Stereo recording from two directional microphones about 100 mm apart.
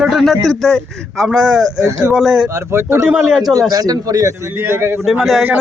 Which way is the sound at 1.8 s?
35° right (ahead or behind).